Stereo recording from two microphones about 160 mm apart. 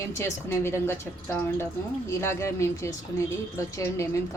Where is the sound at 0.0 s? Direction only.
15° left (ahead or behind).